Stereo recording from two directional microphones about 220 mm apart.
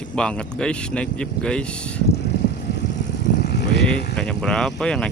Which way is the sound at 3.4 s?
50° left (ahead or behind).